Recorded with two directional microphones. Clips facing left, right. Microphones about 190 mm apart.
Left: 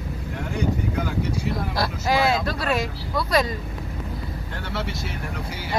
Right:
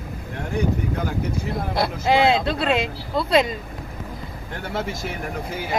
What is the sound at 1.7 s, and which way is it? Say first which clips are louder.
Speech: right 5 dB; 20° right (ahead or behind).